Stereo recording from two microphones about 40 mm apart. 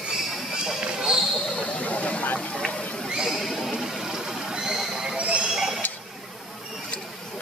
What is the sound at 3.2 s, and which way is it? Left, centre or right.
Neigh, centre.